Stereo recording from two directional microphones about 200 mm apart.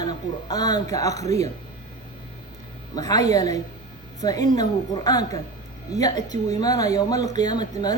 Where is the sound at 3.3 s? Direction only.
15° left (ahead or behind).